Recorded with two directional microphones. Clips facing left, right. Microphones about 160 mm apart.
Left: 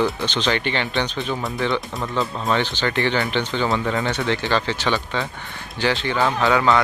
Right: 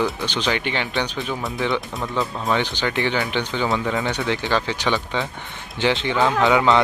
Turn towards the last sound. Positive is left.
turn(degrees=-20)  # may be behind; listen again after turning